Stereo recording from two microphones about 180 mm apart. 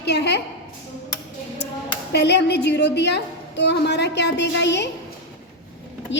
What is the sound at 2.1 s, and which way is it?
A woman's voice, 70° left (ahead or behind).